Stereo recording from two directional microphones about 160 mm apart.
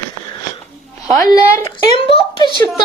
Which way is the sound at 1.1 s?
25° left (ahead or behind).